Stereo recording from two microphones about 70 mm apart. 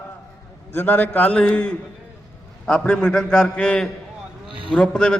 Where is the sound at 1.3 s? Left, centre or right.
Centre.